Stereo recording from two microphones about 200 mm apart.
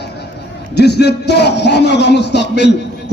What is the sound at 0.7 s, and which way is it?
A man's voice, 55° left (ahead or behind).